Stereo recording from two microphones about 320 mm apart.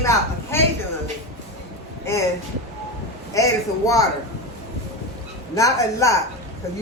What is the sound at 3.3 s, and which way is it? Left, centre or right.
Speech, centre.